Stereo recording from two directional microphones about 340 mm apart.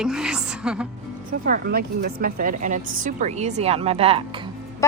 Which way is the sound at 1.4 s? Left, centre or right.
Right.